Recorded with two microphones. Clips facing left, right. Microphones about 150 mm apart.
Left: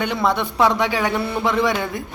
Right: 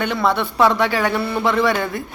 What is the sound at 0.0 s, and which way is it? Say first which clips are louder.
A woman's voice: right 1 dB; 15° left (ahead or behind).